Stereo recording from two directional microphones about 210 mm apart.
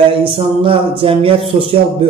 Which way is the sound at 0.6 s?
25° right (ahead or behind).